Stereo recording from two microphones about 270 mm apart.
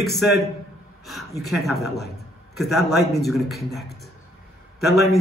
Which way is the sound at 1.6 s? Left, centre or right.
Left.